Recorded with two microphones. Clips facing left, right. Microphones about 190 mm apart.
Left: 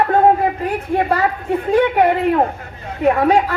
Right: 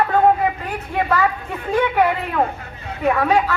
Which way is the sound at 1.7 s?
35° left (ahead or behind).